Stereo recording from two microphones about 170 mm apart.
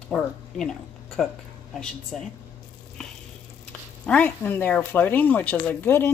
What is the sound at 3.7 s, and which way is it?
Speech, 5° left (ahead or behind).